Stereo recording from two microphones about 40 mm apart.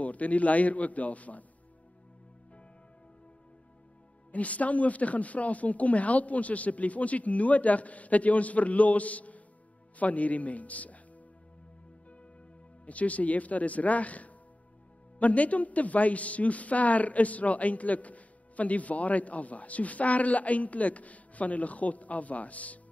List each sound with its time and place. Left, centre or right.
0.0 s a man's voice: left
4.3 s a man's voice: left
12.8 s a man's voice: left